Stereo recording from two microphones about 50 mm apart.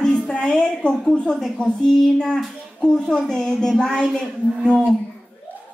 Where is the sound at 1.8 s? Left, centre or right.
Centre.